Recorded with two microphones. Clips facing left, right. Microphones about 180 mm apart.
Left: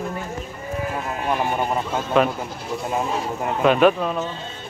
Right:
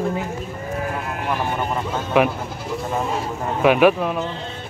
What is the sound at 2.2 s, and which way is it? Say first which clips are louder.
Speech: right 1 dB; 10° right (ahead or behind).